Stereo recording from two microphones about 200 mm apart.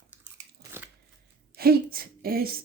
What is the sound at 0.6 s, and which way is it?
Biting, 10° right (ahead or behind).